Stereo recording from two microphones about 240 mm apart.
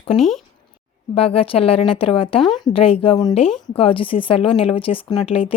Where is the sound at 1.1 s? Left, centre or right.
Left.